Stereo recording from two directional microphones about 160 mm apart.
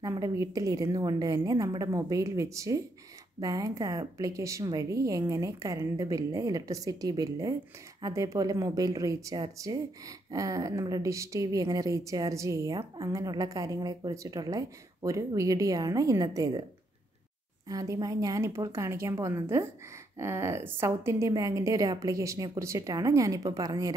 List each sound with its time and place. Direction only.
0.0 s a woman's voice: 20° right (ahead or behind)
17.6 s a woman's voice: 20° right (ahead or behind)